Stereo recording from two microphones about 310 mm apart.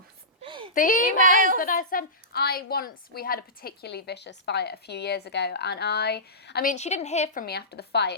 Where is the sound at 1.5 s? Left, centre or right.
Left.